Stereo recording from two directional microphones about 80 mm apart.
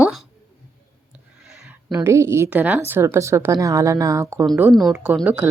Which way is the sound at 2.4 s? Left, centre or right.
Centre.